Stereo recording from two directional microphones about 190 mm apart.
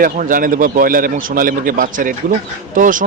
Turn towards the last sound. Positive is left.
turn(degrees=-45)  # may be behind; listen again after turning